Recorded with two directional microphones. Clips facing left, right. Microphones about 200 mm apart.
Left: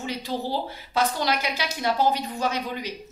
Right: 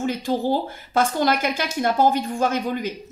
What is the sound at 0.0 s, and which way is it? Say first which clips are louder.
A woman's voice: right 7 dB; 50° right (ahead or behind).